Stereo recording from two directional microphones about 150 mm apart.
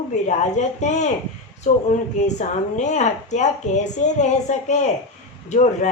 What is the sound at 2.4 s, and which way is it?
A woman's voice, 50° left (ahead or behind).